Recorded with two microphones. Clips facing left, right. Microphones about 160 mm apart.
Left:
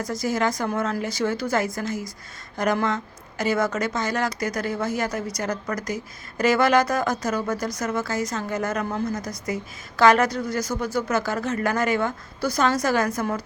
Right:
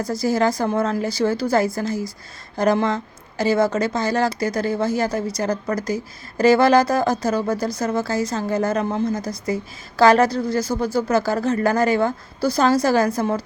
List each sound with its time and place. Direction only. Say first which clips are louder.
0.0 s a woman's voice: right 5 dB; 30° right (ahead or behind)